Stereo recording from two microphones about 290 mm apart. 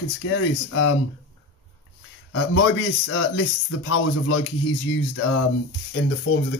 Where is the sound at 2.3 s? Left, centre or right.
Left.